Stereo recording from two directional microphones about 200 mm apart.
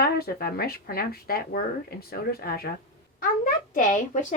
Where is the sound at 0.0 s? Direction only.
50° left (ahead or behind).